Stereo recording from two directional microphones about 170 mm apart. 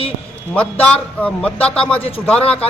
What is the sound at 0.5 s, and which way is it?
A man's voice, 10° left (ahead or behind).